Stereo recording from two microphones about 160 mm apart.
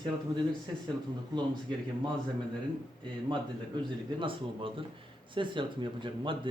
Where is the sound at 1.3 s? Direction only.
30° right (ahead or behind).